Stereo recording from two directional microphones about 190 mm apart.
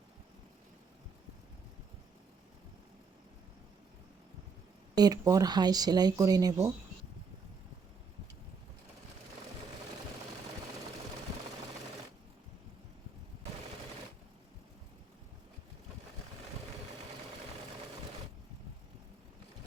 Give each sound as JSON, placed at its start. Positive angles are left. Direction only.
{"t": 4.9, "sound": "speech", "side_deg": -20}